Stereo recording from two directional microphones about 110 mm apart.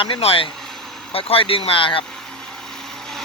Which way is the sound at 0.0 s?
60° left (ahead or behind).